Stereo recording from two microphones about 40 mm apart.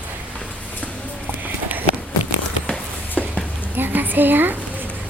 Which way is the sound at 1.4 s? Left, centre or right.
Right.